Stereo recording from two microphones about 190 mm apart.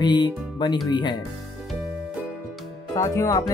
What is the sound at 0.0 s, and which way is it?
Speech, 25° left (ahead or behind).